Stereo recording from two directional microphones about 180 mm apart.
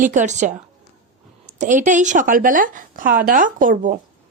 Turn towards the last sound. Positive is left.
turn(degrees=-50)  # may be behind; listen again after turning